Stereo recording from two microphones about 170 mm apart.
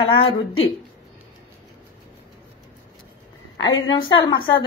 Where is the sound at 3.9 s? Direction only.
30° left (ahead or behind).